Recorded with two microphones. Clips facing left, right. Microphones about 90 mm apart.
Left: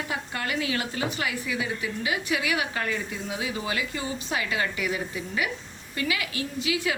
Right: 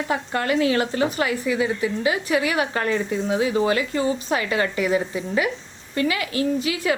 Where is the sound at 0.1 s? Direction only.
40° right (ahead or behind).